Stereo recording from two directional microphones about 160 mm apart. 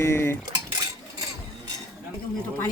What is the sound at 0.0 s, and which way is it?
Speech, 15° left (ahead or behind).